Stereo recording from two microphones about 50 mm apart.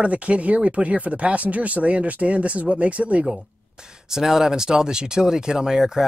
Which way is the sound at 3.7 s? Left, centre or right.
Centre.